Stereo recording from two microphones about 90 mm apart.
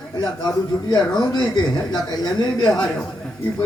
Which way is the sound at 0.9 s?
50° left (ahead or behind).